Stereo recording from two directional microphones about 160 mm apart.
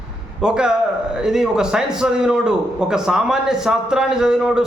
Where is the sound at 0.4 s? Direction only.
5° right (ahead or behind).